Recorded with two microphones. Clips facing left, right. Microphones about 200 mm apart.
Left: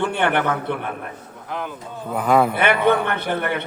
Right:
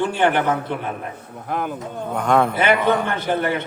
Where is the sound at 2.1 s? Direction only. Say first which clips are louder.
Left 1 dB; 5° left (ahead or behind).